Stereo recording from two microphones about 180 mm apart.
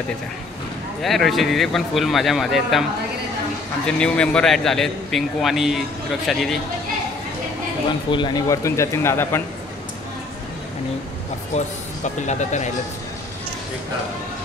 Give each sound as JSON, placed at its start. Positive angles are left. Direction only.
{"t": 1.0, "sound": "a man's voice", "side_deg": 0}
{"t": 3.8, "sound": "a man's voice", "side_deg": 5}
{"t": 8.1, "sound": "speech", "side_deg": 25}
{"t": 11.5, "sound": "speech", "side_deg": 40}